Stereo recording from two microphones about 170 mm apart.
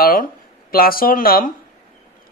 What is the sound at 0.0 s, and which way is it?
Speech, 60° left (ahead or behind).